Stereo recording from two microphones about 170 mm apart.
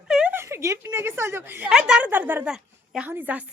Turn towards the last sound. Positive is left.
turn(degrees=-10)  # may be behind; listen again after turning